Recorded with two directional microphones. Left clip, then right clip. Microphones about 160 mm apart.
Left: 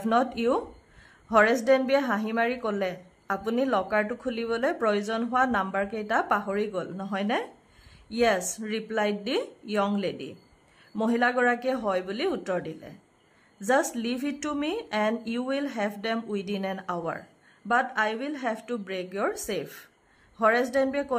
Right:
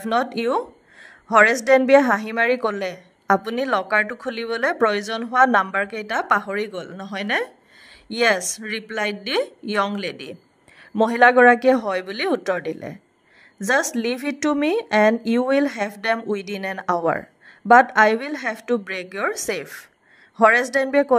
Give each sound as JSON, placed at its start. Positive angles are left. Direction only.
{"t": 0.1, "sound": "a woman's voice", "side_deg": -35}